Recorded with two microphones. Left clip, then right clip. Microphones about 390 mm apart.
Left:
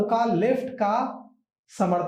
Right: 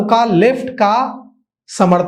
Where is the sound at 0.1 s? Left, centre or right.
Right.